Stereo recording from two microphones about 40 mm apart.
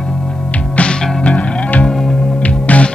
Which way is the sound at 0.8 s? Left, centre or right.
Left.